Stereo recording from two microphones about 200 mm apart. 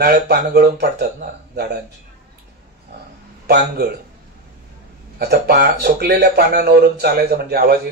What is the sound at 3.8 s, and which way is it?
Speech, 50° right (ahead or behind).